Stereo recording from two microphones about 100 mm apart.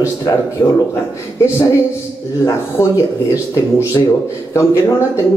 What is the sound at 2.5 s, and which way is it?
A man's voice, 30° left (ahead or behind).